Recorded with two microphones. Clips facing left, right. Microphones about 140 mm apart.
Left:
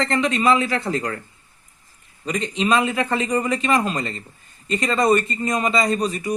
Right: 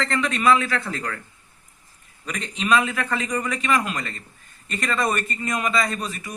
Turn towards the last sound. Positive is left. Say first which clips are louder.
# left 9 dB
turn(degrees=35)  # may be behind; listen again after turning